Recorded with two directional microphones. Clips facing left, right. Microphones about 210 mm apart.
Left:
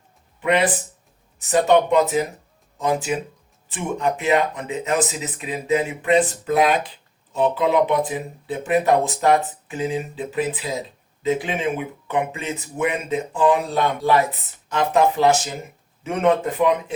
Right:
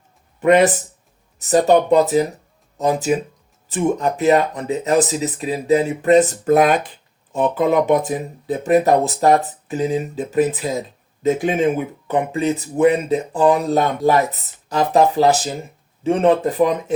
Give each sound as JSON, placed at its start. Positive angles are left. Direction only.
{"t": 0.3, "sound": "speech", "side_deg": -45}